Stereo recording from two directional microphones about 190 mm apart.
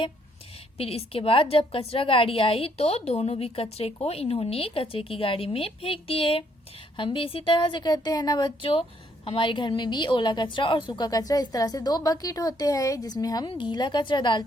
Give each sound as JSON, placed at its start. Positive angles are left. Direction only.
{"t": 0.8, "sound": "a woman's voice", "side_deg": 30}